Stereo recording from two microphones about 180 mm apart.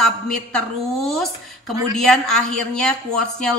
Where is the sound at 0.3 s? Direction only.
5° left (ahead or behind).